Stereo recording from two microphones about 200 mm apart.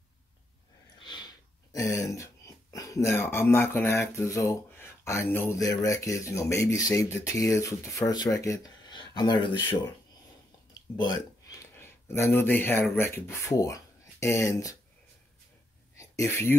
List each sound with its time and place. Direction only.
1.0 s a sound: 20° left (ahead or behind)
6.6 s speech: 15° left (ahead or behind)
11.6 s speech: 10° left (ahead or behind)
16.0 s speech: 15° left (ahead or behind)